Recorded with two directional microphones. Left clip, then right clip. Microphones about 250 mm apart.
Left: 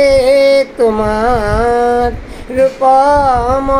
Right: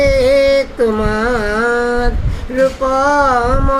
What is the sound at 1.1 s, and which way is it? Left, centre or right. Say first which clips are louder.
Carnatic music: left 3 dB; centre.